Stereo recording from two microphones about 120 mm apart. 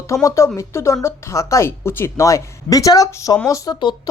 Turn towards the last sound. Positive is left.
turn(degrees=30)  # may be behind; listen again after turning